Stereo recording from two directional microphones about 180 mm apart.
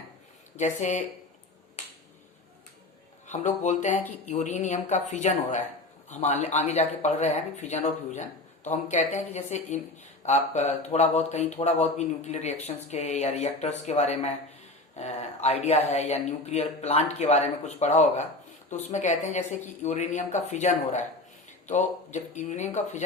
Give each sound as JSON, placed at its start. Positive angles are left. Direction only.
{"t": 0.5, "sound": "speech", "side_deg": 40}
{"t": 3.2, "sound": "speech", "side_deg": 40}